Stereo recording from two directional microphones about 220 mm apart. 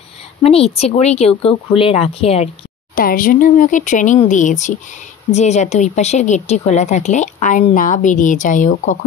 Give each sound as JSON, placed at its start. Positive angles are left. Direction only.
{"t": 0.4, "sound": "speech", "side_deg": 25}
{"t": 3.0, "sound": "a woman's voice", "side_deg": 40}